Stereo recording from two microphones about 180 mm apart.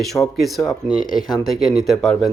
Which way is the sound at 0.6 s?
5° left (ahead or behind).